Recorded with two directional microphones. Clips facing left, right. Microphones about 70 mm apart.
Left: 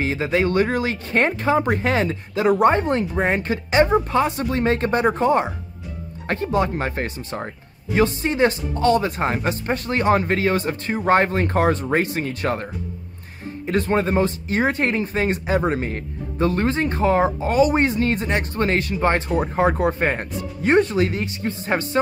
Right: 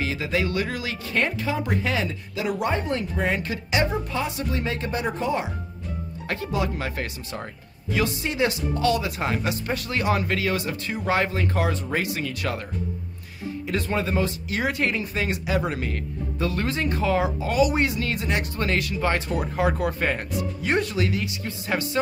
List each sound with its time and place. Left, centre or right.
0.0 s speech: left
13.7 s speech: left